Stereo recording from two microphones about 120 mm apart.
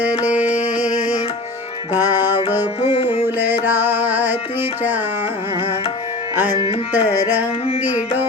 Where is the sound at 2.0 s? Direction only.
35° left (ahead or behind).